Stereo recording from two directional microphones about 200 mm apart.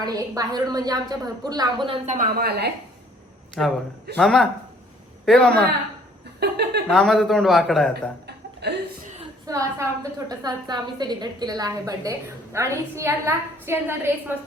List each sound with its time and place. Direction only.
0.0 s a woman's voice: 20° right (ahead or behind)
2.0 s a woman's voice: 40° right (ahead or behind)
3.6 s speech: centre (ahead or behind)
6.4 s a sound: 55° right (ahead or behind)
6.8 s speech: 5° left (ahead or behind)
8.6 s chuckle: 55° right (ahead or behind)
9.5 s a woman's voice: 15° right (ahead or behind)